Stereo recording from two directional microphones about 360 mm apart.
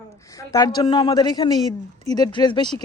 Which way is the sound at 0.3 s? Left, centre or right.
Centre.